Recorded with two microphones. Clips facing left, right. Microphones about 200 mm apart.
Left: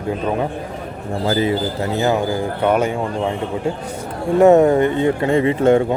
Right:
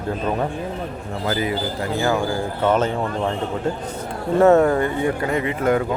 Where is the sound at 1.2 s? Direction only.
25° left (ahead or behind); by 3.3 s 10° left (ahead or behind).